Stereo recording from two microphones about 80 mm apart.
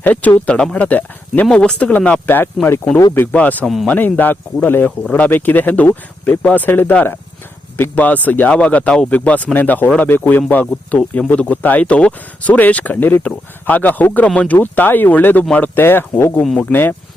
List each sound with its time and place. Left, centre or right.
0.0 s speech: centre